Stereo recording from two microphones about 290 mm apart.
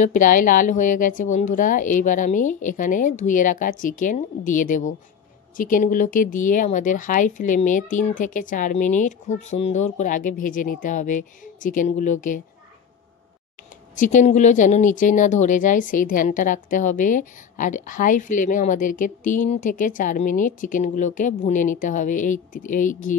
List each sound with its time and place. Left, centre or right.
0.0 s speech: left
13.9 s speech: left